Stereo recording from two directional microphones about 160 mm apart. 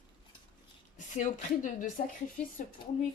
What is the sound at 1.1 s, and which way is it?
Speech, 50° left (ahead or behind).